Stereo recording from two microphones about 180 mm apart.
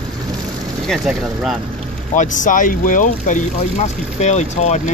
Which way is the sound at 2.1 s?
45° left (ahead or behind).